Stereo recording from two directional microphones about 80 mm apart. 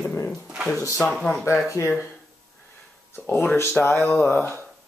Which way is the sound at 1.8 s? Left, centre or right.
Left.